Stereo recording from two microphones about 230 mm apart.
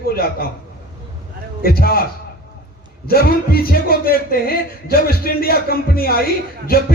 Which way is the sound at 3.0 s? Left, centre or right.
Left.